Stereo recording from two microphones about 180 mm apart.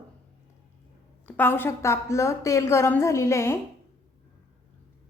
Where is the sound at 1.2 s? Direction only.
10° left (ahead or behind).